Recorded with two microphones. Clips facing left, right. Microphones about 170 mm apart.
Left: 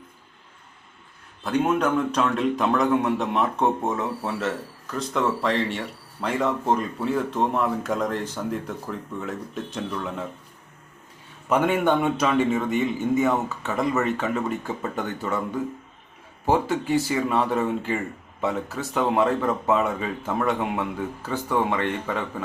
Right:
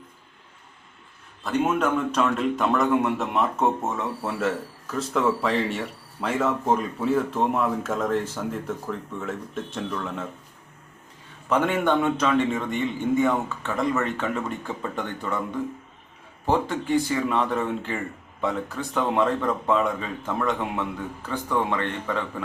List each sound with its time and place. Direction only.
1.5 s a man's voice: centre (ahead or behind)
11.4 s a man's voice: 10° left (ahead or behind)
16.5 s a man's voice: 5° left (ahead or behind)